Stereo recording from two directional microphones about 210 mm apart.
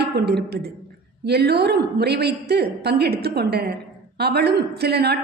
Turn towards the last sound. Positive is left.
turn(degrees=-50)  # may be behind; listen again after turning